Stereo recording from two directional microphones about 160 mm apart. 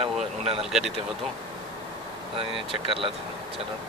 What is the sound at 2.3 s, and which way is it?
Speech, 35° right (ahead or behind).